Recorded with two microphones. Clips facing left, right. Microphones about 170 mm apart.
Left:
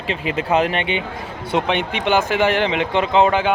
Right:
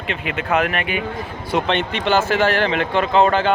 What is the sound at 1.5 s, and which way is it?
Speech, 15° left (ahead or behind).